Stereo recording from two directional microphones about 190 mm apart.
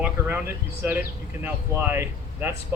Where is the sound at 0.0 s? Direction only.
10° right (ahead or behind).